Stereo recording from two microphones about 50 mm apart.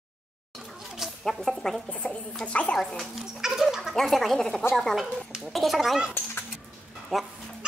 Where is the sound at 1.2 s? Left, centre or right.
Centre.